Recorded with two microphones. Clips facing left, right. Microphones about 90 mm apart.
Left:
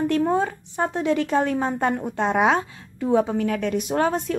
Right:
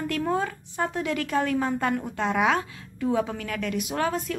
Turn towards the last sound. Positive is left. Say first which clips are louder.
# left 5 dB
turn(degrees=30)  # may be behind; listen again after turning